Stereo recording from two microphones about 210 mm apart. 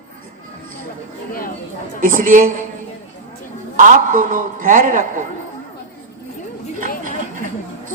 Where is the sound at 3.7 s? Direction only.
40° right (ahead or behind).